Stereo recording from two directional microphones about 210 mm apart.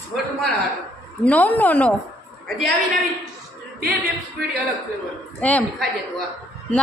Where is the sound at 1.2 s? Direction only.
5° left (ahead or behind).